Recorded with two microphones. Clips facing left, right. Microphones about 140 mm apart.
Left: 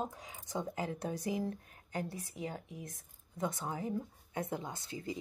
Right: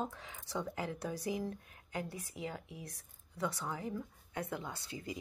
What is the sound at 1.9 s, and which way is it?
Speech, 40° left (ahead or behind).